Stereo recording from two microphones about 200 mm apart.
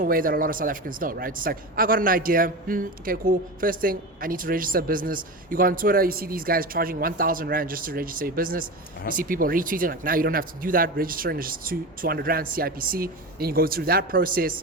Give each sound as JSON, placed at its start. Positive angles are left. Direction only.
{"t": 0.0, "sound": "a man's voice", "side_deg": -45}